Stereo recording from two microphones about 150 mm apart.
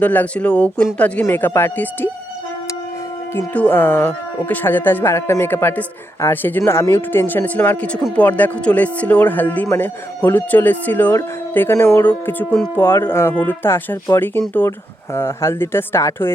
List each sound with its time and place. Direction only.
0.0 s speech: 10° left (ahead or behind)
3.3 s speech: 10° left (ahead or behind)